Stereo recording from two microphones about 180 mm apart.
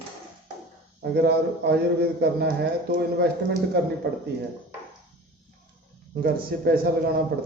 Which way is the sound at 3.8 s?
65° right (ahead or behind).